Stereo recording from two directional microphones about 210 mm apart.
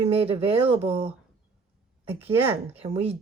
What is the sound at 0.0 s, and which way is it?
Speech, 30° right (ahead or behind).